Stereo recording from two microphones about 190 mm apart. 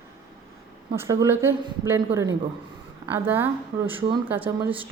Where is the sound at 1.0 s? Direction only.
15° right (ahead or behind).